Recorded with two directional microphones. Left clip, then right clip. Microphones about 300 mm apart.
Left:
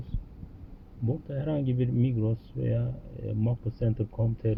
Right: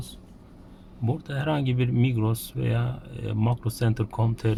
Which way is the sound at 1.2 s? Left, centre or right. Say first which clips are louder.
Right 5 dB; centre.